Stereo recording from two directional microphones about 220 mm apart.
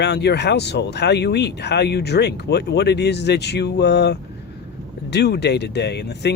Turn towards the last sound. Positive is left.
turn(degrees=50)  # may be behind; listen again after turning